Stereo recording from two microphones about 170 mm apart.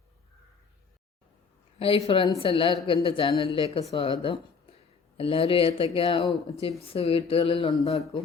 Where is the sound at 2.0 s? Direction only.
30° left (ahead or behind).